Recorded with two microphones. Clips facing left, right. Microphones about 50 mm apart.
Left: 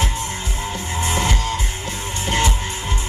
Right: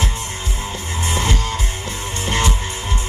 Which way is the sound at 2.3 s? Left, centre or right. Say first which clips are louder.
Even; right.